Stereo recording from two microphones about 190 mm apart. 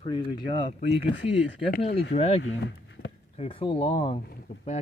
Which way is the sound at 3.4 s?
30° left (ahead or behind).